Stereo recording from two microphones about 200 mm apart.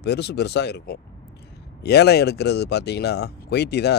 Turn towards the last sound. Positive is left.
turn(degrees=55)  # may be behind; listen again after turning